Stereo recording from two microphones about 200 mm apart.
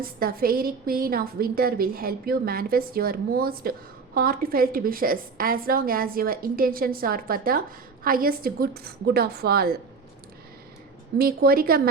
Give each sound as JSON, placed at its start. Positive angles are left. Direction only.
{"t": 0.0, "sound": "a woman's voice", "side_deg": -45}
{"t": 11.2, "sound": "a woman's voice", "side_deg": -45}